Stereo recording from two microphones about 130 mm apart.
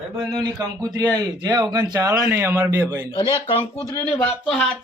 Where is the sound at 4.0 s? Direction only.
10° left (ahead or behind).